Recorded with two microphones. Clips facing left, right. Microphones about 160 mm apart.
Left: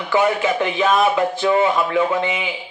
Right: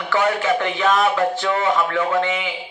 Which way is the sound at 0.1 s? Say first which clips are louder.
Left 1 dB; 15° left (ahead or behind).